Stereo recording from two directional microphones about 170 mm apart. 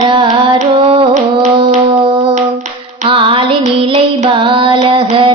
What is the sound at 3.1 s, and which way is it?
Female singing, 30° right (ahead or behind).